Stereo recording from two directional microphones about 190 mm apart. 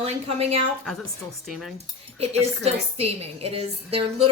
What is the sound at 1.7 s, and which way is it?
Speech, 35° right (ahead or behind).